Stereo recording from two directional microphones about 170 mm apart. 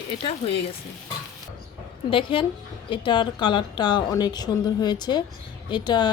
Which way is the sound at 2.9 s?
30° left (ahead or behind).